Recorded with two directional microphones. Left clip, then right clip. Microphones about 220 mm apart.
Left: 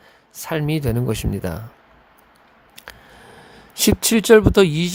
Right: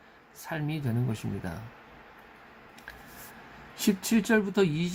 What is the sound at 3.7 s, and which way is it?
Speech, 50° left (ahead or behind).